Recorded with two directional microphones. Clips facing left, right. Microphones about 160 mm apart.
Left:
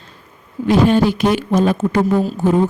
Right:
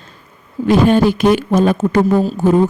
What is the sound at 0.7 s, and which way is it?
Speech, 50° right (ahead or behind).